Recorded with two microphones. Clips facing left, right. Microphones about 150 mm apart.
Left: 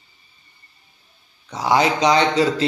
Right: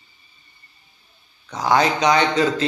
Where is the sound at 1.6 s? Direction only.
25° left (ahead or behind).